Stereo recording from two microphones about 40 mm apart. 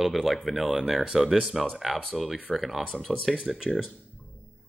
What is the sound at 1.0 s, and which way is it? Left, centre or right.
Speech, centre.